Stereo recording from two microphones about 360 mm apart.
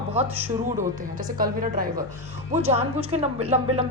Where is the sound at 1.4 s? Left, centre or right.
Right.